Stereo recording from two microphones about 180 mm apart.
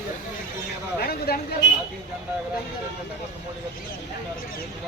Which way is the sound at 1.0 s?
60° left (ahead or behind).